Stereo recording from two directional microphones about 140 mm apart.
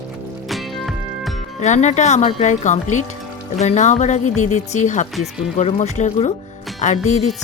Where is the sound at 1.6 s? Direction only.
55° left (ahead or behind).